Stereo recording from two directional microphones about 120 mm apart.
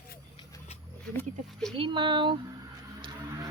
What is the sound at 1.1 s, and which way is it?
Speech, 10° left (ahead or behind).